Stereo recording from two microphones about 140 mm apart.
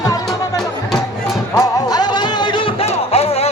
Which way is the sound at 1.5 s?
30° left (ahead or behind).